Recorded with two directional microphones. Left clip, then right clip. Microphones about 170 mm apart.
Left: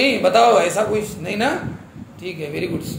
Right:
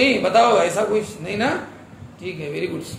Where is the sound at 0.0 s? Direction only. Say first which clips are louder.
Left 1 dB; 10° left (ahead or behind).